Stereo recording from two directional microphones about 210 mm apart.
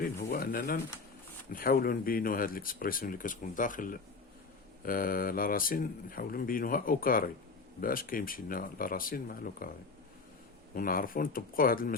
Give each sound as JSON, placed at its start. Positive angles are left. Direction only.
{"t": 0.0, "sound": "speech", "side_deg": 45}
{"t": 10.8, "sound": "speech", "side_deg": 40}